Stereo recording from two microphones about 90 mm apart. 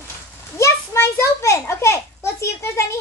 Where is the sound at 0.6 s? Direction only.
30° left (ahead or behind).